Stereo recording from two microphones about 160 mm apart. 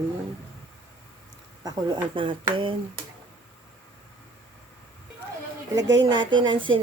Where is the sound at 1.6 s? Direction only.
25° right (ahead or behind).